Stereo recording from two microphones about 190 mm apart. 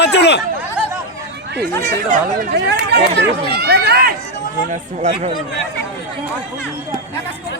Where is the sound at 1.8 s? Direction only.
45° right (ahead or behind).